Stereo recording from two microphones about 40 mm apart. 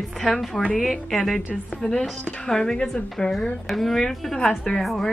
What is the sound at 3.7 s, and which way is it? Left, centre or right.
A woman's voice, centre.